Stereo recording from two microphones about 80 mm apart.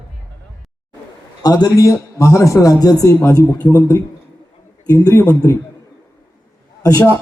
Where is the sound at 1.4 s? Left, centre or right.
Left.